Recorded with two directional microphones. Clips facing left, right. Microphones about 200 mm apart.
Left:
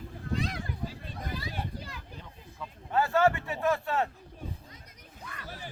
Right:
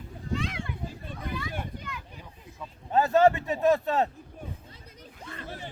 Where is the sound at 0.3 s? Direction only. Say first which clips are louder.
Right 1 dB; 40° left (ahead or behind).